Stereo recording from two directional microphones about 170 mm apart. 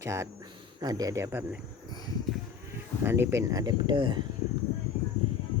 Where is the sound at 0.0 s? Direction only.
15° right (ahead or behind).